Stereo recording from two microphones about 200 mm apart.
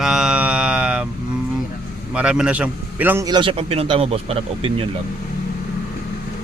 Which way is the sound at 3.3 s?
25° right (ahead or behind).